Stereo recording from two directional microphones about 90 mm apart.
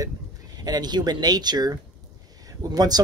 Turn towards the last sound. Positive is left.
turn(degrees=-45)  # may be behind; listen again after turning